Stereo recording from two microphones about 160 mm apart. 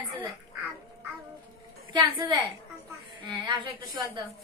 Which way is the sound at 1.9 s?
25° right (ahead or behind).